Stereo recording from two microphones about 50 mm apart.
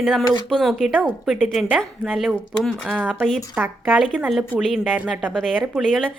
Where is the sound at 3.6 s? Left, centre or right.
Right.